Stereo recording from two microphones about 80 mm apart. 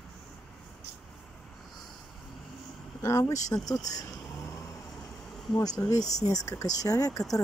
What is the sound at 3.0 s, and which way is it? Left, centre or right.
Speech, left.